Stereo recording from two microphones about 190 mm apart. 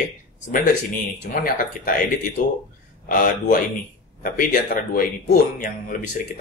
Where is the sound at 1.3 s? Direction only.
45° left (ahead or behind).